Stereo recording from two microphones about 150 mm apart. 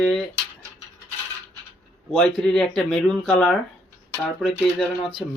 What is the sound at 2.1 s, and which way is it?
Speech, 5° left (ahead or behind).